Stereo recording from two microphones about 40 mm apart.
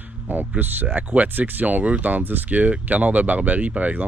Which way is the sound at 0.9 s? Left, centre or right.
Right.